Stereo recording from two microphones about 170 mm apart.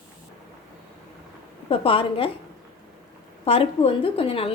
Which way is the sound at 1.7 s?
30° left (ahead or behind).